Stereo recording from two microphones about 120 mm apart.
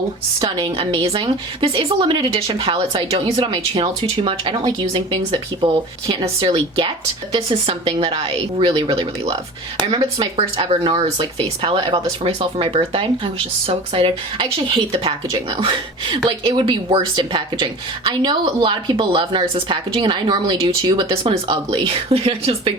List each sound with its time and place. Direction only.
0.3 s speech: 35° right (ahead or behind)
1.0 s speech: 50° right (ahead or behind)